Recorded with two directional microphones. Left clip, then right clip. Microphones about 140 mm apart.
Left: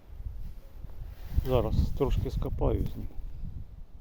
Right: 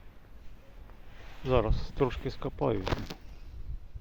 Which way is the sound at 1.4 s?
20° left (ahead or behind).